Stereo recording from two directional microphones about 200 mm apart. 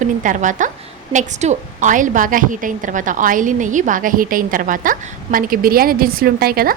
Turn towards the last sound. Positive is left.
turn(degrees=-50)  # may be behind; listen again after turning